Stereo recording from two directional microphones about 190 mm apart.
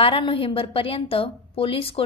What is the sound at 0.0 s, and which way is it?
A woman's voice, 30° left (ahead or behind).